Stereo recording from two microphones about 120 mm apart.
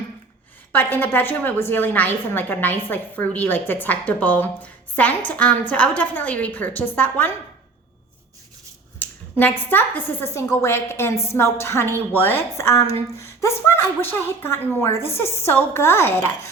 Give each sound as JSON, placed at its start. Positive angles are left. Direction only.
{"t": 0.7, "sound": "a woman's voice", "side_deg": 15}
{"t": 9.0, "sound": "speech", "side_deg": 15}